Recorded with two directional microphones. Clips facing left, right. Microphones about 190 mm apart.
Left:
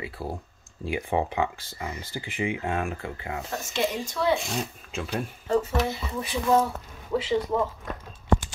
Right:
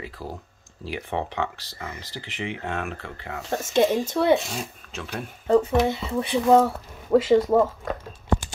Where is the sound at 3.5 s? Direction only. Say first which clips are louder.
Right 9 dB; 50° right (ahead or behind).